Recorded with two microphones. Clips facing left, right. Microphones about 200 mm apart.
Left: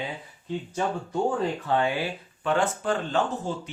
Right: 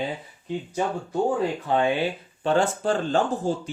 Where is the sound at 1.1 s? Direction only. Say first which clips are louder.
Right 3 dB; 15° right (ahead or behind).